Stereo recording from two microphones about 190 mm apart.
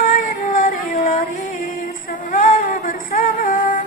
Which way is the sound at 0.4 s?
45° left (ahead or behind).